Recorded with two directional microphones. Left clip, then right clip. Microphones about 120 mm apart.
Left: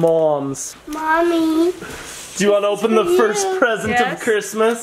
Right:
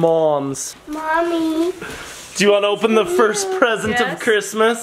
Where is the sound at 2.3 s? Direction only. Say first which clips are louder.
Right 1 dB; 20° right (ahead or behind).